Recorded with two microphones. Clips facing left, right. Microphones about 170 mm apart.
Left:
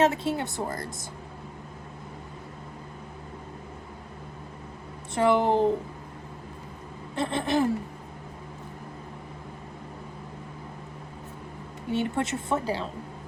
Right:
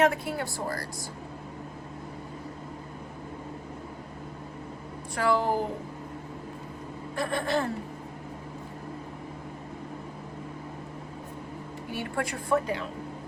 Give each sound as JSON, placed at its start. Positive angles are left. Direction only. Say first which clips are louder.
{"t": 0.0, "sound": "a woman's voice", "louder": "left 1 dB", "side_deg": 25}
{"t": 5.1, "sound": "a woman's voice", "louder": "left 4 dB", "side_deg": 20}
{"t": 7.2, "sound": "a woman's voice", "louder": "left 3 dB", "side_deg": 20}
{"t": 11.9, "sound": "a woman's voice", "louder": "left 5 dB", "side_deg": 25}